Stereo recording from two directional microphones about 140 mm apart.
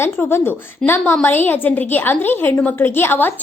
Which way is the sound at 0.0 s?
15° left (ahead or behind).